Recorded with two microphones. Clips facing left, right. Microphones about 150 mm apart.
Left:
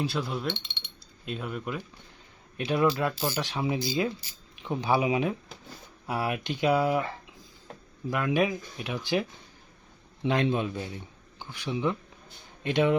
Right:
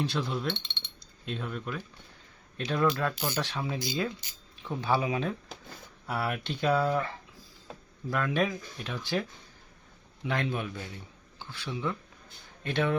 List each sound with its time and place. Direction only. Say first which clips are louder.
0.0 s a man's voice: left 1 dB; 5° left (ahead or behind)
8.1 s speech: left 3 dB; 10° left (ahead or behind)
10.2 s a man's voice: left 6 dB; 20° left (ahead or behind)